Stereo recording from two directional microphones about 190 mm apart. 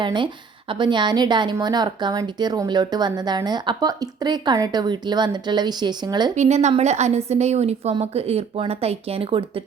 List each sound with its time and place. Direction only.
0.0 s speech: 25° right (ahead or behind)
6.3 s a woman's voice: 35° right (ahead or behind)